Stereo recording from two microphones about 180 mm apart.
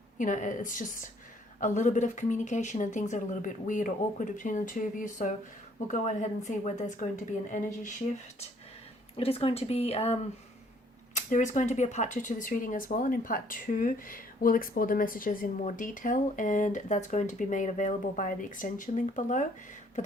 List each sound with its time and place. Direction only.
0.2 s speech: 45° left (ahead or behind)
9.1 s speech: 35° left (ahead or behind)